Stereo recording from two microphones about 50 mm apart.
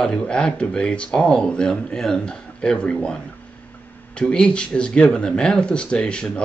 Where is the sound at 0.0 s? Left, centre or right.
Centre.